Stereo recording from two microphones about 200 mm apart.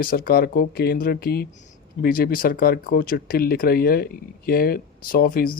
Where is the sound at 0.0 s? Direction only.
45° left (ahead or behind).